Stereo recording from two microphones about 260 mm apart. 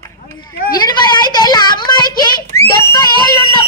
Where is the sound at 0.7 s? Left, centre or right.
Centre.